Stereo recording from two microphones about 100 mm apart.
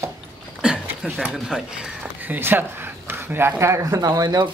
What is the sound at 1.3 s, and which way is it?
Speech, 5° right (ahead or behind).